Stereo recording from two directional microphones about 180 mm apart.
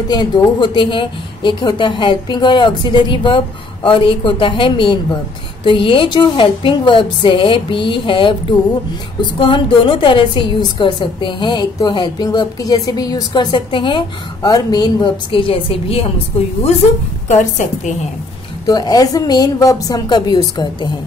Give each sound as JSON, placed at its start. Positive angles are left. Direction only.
{"t": 0.1, "sound": "a woman's voice", "side_deg": 25}
{"t": 17.3, "sound": "a woman's voice", "side_deg": 40}
{"t": 18.7, "sound": "a woman's voice", "side_deg": 20}